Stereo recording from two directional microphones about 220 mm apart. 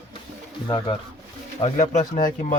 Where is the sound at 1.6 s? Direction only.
30° left (ahead or behind).